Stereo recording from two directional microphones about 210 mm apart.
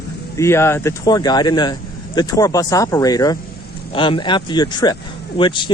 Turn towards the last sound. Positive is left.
turn(degrees=20)  # may be behind; listen again after turning